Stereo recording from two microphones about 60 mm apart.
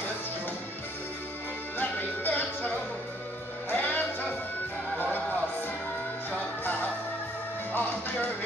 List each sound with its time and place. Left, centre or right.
1.8 s music: left
3.7 s music: left
6.6 s music: left